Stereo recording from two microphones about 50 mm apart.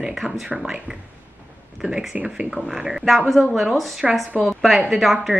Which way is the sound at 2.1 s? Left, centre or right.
Right.